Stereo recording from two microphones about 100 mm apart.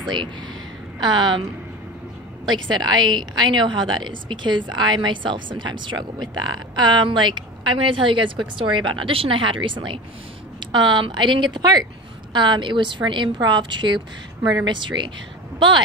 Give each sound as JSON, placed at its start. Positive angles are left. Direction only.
{"t": 0.0, "sound": "a woman's voice", "side_deg": -50}
{"t": 2.4, "sound": "a woman's voice", "side_deg": -45}